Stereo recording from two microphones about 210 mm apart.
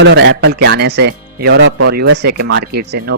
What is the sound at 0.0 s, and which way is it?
Speech, 55° right (ahead or behind).